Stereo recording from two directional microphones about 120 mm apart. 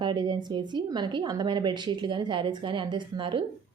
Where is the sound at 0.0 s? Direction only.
40° right (ahead or behind).